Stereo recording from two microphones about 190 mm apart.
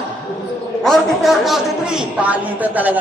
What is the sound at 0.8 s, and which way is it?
Speech, centre (ahead or behind).